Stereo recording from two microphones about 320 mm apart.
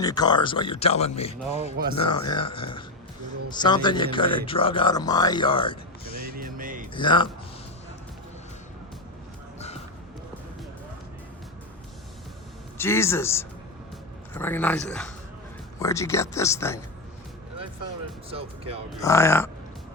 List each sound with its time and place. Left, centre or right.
0.0 s speech: centre
6.1 s music: right
6.9 s speech: centre
12.7 s speech: centre
18.3 s speech: centre
18.9 s speech: centre